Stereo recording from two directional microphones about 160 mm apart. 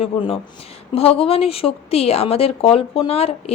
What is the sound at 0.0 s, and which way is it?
Speech, 35° left (ahead or behind).